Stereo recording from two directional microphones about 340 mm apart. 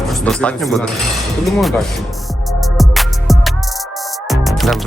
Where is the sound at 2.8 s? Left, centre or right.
Centre.